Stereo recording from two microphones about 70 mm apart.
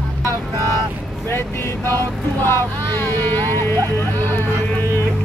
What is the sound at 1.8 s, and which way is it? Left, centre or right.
Vehicle, left.